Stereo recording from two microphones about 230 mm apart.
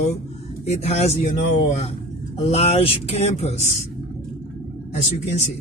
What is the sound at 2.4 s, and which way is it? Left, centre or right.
Speech, left.